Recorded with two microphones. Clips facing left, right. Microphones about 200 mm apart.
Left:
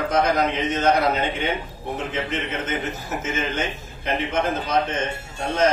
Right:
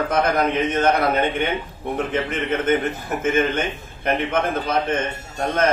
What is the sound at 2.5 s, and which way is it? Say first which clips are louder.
A man's voice: right 7 dB; 55° right (ahead or behind).